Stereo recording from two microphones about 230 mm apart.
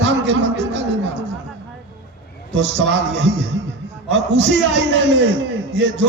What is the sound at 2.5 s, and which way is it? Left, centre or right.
A man's voice, right.